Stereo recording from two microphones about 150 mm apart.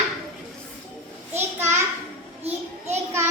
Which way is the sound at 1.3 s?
15° right (ahead or behind).